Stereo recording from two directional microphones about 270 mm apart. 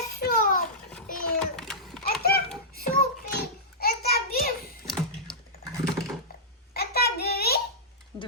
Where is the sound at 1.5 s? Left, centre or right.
Centre.